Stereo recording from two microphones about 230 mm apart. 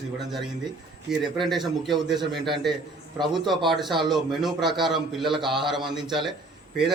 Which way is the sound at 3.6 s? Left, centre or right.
Centre.